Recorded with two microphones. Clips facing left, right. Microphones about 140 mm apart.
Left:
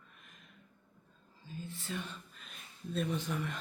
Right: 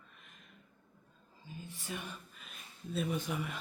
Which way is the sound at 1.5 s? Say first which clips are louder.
Left 3 dB; 15° right (ahead or behind).